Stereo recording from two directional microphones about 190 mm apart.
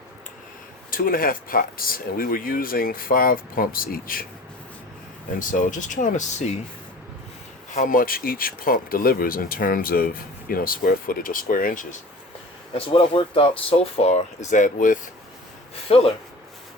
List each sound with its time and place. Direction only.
0.9 s speech: 50° left (ahead or behind)
5.4 s speech: 45° left (ahead or behind)
7.7 s speech: 45° left (ahead or behind)
12.7 s speech: 30° left (ahead or behind)
15.9 s speech: 30° left (ahead or behind)